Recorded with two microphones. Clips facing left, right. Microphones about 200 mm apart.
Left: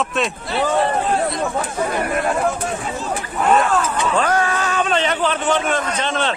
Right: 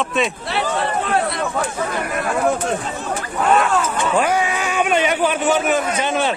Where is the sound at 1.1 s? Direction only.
65° right (ahead or behind).